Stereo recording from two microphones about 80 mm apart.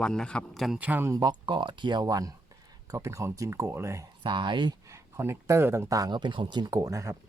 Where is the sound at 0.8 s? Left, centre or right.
Right.